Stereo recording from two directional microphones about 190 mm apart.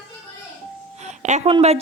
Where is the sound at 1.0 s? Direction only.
35° right (ahead or behind).